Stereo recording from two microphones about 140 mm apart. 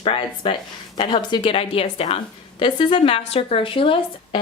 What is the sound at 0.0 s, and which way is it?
A woman's voice, 40° left (ahead or behind).